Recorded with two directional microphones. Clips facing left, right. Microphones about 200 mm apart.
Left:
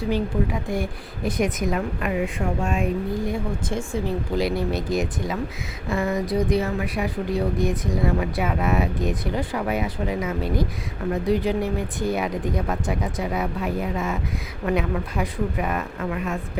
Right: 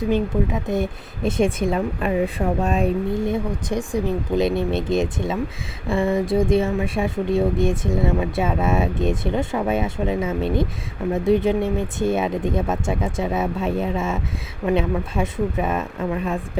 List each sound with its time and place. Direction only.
0.0 s speech: 20° right (ahead or behind)
3.2 s speech: 25° right (ahead or behind)